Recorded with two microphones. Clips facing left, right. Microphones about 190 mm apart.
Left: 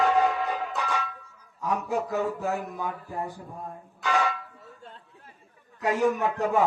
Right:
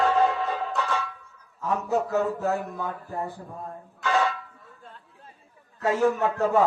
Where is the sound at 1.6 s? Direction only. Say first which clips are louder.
Right 2 dB; 15° left (ahead or behind).